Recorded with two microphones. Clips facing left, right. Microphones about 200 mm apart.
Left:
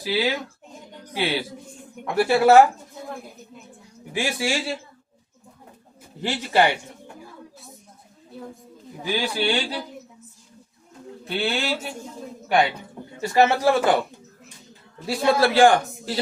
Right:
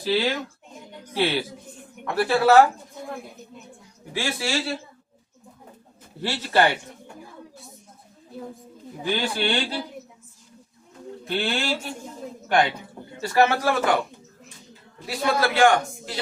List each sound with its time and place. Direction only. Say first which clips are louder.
0.0 s a man's voice: right 1 dB; 10° left (ahead or behind)
4.1 s a man's voice: left 2 dB; 20° left (ahead or behind)
6.2 s a man's voice: left 1 dB; 15° left (ahead or behind)
9.1 s a man's voice: left 2 dB; 10° left (ahead or behind)
11.3 s a man's voice: left 1 dB; 5° left (ahead or behind)
13.2 s a man's voice: left 2 dB; 25° left (ahead or behind)
15.0 s a man's voice: left 4 dB; 30° left (ahead or behind)
15.8 s a man's voice: left 3 dB; centre (ahead or behind)